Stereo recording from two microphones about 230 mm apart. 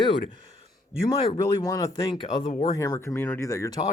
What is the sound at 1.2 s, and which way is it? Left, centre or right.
Speech, centre.